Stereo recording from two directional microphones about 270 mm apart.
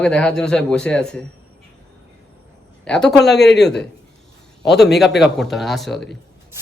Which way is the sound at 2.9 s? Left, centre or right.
Centre.